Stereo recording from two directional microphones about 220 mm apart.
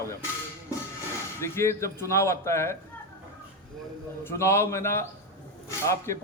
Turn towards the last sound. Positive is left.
turn(degrees=15)  # may be behind; listen again after turning